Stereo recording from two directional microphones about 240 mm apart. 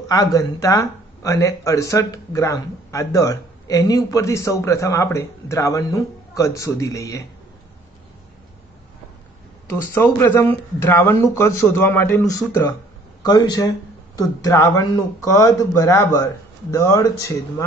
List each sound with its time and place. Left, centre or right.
0.1 s speech: centre
9.7 s speech: centre